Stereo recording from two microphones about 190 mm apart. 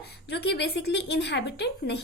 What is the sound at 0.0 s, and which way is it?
A woman's voice, 60° left (ahead or behind).